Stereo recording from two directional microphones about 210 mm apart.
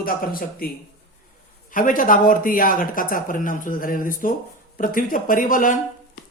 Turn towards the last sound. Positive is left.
turn(degrees=40)  # may be behind; listen again after turning